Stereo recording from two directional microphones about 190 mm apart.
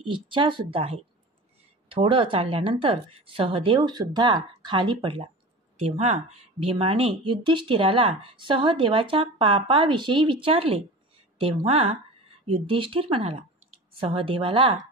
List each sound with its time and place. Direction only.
0.0 s speech: 25° right (ahead or behind)